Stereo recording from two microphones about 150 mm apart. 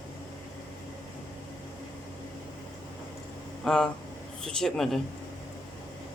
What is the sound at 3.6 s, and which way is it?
Speech, 5° left (ahead or behind).